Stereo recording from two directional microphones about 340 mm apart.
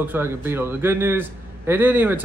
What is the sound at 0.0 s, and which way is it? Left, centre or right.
Speech, centre.